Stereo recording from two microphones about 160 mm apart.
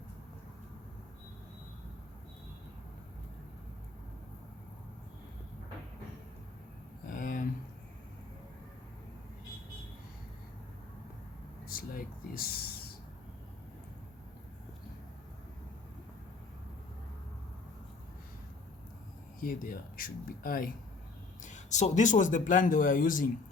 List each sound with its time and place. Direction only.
7.1 s a sound: 55° left (ahead or behind)
11.7 s speech: 65° left (ahead or behind)
19.4 s speech: 60° left (ahead or behind)
21.4 s a man's voice: 50° left (ahead or behind)